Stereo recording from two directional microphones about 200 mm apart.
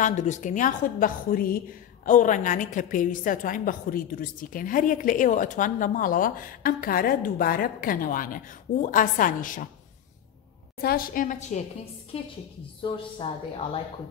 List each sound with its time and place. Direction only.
0.0 s a woman's voice: 35° left (ahead or behind)
10.8 s a woman's voice: 50° left (ahead or behind); by 13.0 s 25° left (ahead or behind)